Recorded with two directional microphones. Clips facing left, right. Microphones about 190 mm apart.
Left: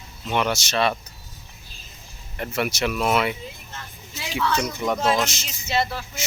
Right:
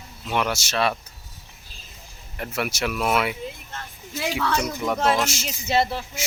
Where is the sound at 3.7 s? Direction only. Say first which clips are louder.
Right 4 dB; 55° right (ahead or behind).